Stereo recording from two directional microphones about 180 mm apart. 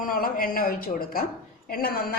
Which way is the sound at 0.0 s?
50° left (ahead or behind).